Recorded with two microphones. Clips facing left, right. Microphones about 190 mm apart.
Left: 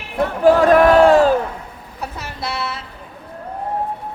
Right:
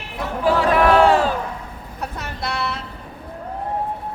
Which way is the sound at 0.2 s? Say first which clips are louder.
Left 6 dB; 45° left (ahead or behind).